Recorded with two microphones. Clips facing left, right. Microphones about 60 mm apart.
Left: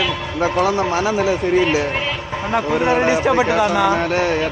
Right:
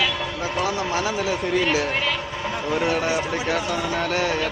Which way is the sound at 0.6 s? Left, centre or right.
Left.